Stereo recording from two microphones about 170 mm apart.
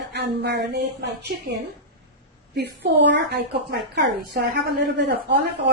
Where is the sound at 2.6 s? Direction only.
85° right.